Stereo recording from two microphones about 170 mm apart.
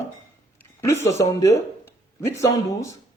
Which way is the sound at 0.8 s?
15° left (ahead or behind).